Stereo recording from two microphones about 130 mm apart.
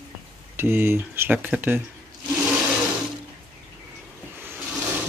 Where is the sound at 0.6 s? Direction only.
15° right (ahead or behind).